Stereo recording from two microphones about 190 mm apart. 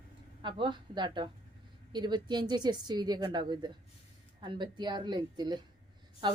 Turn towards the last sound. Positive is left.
turn(degrees=-25)  # may be behind; listen again after turning